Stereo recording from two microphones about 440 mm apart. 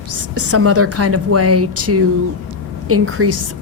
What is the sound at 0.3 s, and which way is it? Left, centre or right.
A woman's voice, right.